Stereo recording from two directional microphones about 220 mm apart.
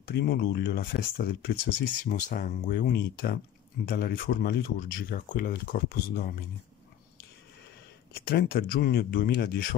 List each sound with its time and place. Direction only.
0.0 s speech: 45° left (ahead or behind)
8.1 s speech: 45° left (ahead or behind)